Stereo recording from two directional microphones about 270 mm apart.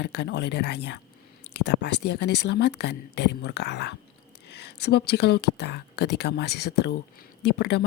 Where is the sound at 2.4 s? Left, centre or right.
Left.